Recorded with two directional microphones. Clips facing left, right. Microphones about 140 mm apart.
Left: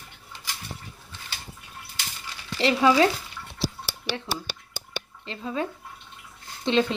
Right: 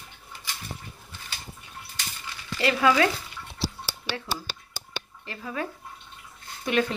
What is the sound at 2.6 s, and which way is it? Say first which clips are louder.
Speech: left 2 dB; 20° left (ahead or behind).